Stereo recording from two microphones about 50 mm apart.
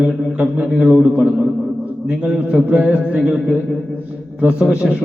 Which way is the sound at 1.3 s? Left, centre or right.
Centre.